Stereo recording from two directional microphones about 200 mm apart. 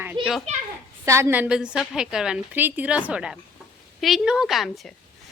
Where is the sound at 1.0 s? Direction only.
15° right (ahead or behind).